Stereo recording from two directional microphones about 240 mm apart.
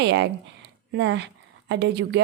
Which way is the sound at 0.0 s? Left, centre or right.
Right.